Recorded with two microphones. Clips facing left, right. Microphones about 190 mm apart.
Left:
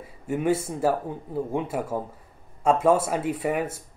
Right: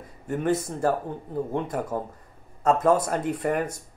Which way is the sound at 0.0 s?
10° left (ahead or behind).